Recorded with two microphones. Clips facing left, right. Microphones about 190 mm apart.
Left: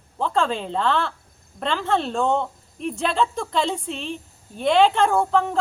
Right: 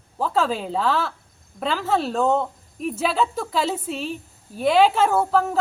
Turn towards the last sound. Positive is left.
turn(degrees=-5)  # may be behind; listen again after turning